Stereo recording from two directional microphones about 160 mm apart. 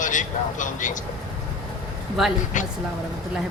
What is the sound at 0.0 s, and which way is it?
Speech, 55° left (ahead or behind).